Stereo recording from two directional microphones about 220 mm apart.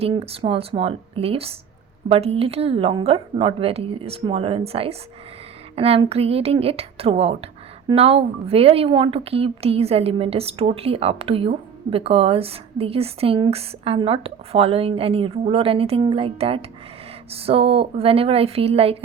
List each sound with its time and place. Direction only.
0.0 s a woman's voice: 25° right (ahead or behind)